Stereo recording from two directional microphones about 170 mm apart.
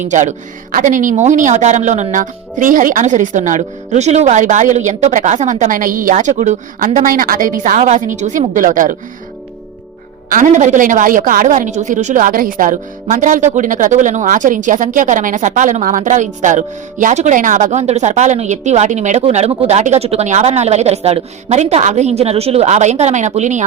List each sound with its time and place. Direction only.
0.1 s a woman's voice: 45° right (ahead or behind)
10.2 s a woman's voice: 50° right (ahead or behind)